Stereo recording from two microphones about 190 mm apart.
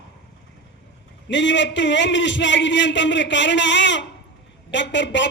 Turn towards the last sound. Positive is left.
turn(degrees=70)  # may be behind; listen again after turning